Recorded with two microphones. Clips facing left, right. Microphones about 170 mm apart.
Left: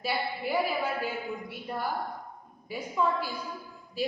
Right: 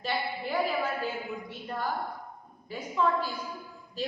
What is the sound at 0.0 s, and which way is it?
A man's voice, 10° left (ahead or behind).